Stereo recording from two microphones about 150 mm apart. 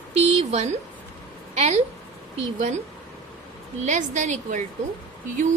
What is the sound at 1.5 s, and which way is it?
Speech, 50° right (ahead or behind).